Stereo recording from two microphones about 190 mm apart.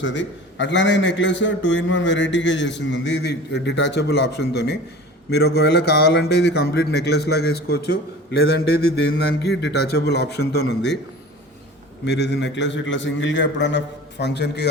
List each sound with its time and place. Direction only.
0.0 s a man's voice: 75° left (ahead or behind)
12.0 s a man's voice: 65° left (ahead or behind)